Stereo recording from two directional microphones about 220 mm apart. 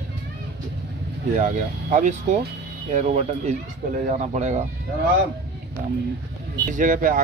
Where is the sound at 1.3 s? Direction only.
40° right (ahead or behind).